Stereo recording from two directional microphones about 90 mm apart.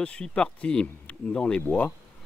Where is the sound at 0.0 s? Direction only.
10° left (ahead or behind).